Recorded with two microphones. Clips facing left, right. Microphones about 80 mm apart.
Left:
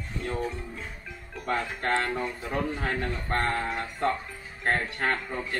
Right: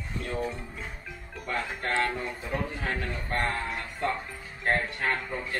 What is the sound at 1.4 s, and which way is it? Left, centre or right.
Speech, left.